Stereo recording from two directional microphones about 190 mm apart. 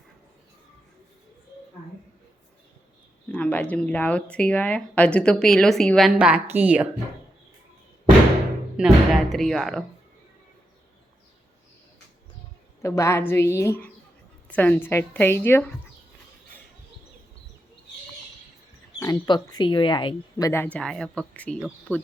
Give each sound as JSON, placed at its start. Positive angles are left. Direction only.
{"t": 3.3, "sound": "speech", "side_deg": 5}
{"t": 8.7, "sound": "speech", "side_deg": 0}
{"t": 12.8, "sound": "a woman's voice", "side_deg": 15}
{"t": 18.9, "sound": "speech", "side_deg": 20}
{"t": 20.7, "sound": "speech", "side_deg": 5}